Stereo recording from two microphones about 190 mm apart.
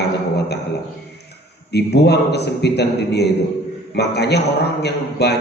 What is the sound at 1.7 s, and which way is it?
A man's voice, 60° left (ahead or behind).